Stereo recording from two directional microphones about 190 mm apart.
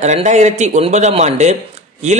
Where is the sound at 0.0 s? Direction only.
40° right (ahead or behind).